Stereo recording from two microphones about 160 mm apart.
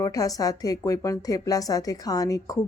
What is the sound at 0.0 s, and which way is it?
A woman's voice, 20° left (ahead or behind).